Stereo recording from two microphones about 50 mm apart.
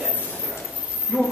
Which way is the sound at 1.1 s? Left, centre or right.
Centre.